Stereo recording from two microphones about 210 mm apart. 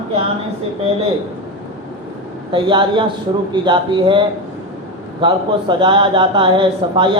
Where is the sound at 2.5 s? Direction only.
25° right (ahead or behind).